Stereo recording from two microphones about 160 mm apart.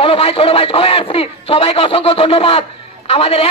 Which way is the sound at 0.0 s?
35° left (ahead or behind).